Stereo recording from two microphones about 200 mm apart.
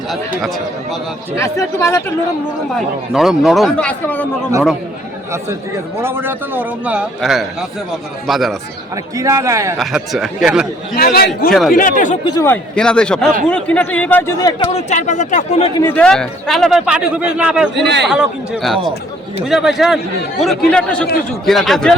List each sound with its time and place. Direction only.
0.1 s a man's voice: centre (ahead or behind)
1.4 s speech: 15° left (ahead or behind)
2.7 s a man's voice: centre (ahead or behind)
5.3 s a man's voice: 15° right (ahead or behind)
9.1 s a man's voice: 15° right (ahead or behind)
9.7 s a man's voice: centre (ahead or behind)
10.9 s a man's voice: 50° left (ahead or behind)
12.2 s a man's voice: 20° left (ahead or behind)
12.5 s a man's voice: 5° left (ahead or behind)
14.7 s speech: 35° left (ahead or behind)
15.8 s a man's voice: 10° left (ahead or behind)
17.7 s a man's voice: 60° right (ahead or behind)
18.1 s a man's voice: 5° right (ahead or behind)